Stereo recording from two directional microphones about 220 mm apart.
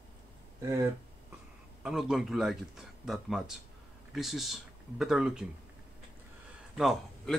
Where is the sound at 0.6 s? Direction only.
15° right (ahead or behind).